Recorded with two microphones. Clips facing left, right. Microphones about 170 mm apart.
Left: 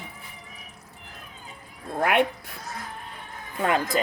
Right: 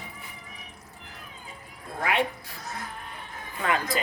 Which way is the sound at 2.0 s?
55° left (ahead or behind).